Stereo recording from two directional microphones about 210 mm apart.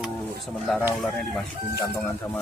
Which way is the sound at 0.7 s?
Centre (ahead or behind).